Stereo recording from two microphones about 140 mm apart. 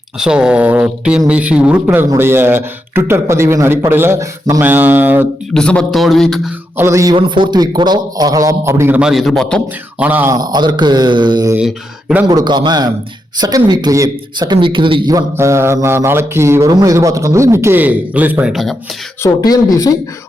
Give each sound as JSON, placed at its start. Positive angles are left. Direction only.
{"t": 0.2, "sound": "a man's voice", "side_deg": -5}
{"t": 5.5, "sound": "a man's voice", "side_deg": 5}
{"t": 6.7, "sound": "mantra", "side_deg": -20}
{"t": 7.2, "sound": "a man's voice", "side_deg": -35}
{"t": 9.0, "sound": "a man's voice", "side_deg": 0}
{"t": 10.0, "sound": "a man's voice", "side_deg": -15}
{"t": 10.3, "sound": "a man's voice", "side_deg": -30}
{"t": 11.5, "sound": "mantra", "side_deg": -10}
{"t": 12.3, "sound": "mantra", "side_deg": -30}
{"t": 13.7, "sound": "a man's voice", "side_deg": -25}
{"t": 15.1, "sound": "mantra", "side_deg": -20}
{"t": 18.5, "sound": "a man's voice", "side_deg": 0}
{"t": 19.2, "sound": "speech", "side_deg": 25}